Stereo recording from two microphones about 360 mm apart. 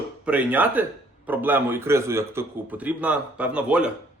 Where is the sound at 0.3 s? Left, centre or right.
Centre.